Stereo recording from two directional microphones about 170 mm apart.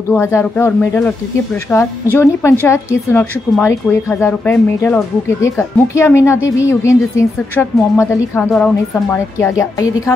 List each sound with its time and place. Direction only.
0.1 s a woman's voice: 15° left (ahead or behind)
8.5 s a woman's voice: 5° left (ahead or behind); by 10.1 s 20° left (ahead or behind)